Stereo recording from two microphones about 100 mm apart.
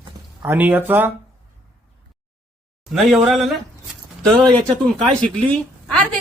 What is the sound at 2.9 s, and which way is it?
Speech, centre (ahead or behind).